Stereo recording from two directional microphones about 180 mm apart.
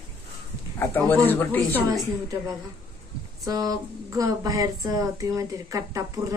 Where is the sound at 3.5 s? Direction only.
20° right (ahead or behind).